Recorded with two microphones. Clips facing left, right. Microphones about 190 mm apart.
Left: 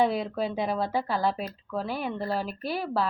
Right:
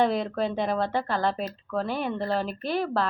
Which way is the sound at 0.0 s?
5° left (ahead or behind).